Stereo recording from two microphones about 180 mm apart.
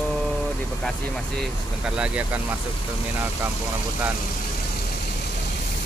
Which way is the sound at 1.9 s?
5° right (ahead or behind).